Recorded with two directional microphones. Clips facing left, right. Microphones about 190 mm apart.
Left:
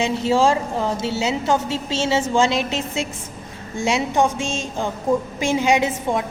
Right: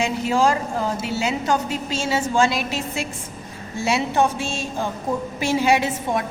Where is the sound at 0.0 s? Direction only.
25° left (ahead or behind).